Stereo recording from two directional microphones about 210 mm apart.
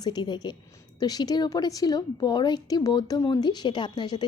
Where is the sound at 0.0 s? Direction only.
20° left (ahead or behind).